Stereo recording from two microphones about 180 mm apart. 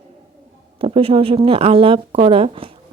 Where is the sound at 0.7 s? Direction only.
30° right (ahead or behind).